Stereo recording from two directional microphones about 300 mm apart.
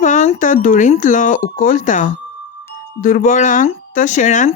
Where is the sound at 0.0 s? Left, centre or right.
Left.